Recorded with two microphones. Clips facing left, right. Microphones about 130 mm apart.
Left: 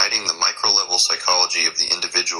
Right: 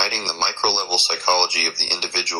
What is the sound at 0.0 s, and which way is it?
Speech, 20° right (ahead or behind).